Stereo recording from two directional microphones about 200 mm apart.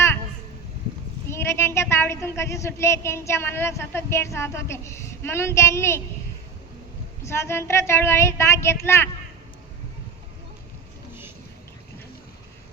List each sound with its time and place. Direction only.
1.3 s a woman's voice: 15° left (ahead or behind)
7.3 s a woman's voice: 15° left (ahead or behind)